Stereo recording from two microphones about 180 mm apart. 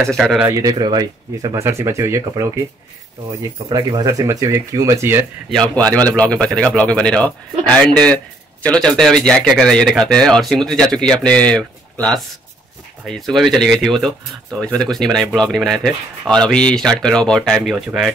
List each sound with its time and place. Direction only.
0.0 s speech: centre (ahead or behind)
0.5 s speech: 20° right (ahead or behind)
3.6 s speech: 20° right (ahead or behind)
5.5 s speech: 5° left (ahead or behind)